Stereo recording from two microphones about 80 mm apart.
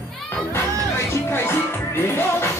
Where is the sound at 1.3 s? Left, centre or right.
Left.